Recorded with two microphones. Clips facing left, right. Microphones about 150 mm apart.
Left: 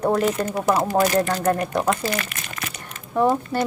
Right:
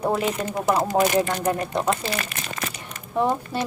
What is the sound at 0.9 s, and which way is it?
Speech, 20° right (ahead or behind).